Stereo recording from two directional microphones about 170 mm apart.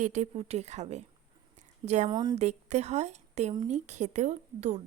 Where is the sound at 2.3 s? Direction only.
40° right (ahead or behind).